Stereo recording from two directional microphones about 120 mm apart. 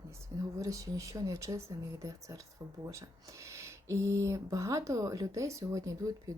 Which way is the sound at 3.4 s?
25° right (ahead or behind).